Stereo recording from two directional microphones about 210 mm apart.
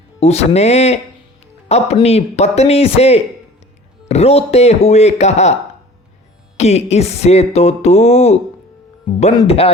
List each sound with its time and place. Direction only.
0.2 s speech: 30° left (ahead or behind)
6.6 s speech: 30° left (ahead or behind)
9.4 s speech: 25° left (ahead or behind)